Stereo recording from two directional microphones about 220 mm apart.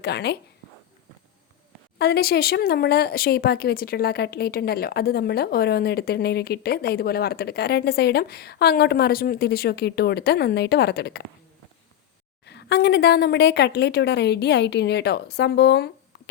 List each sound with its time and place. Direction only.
0.0 s speech: 50° left (ahead or behind)
2.0 s speech: 45° left (ahead or behind)
12.5 s speech: 50° left (ahead or behind)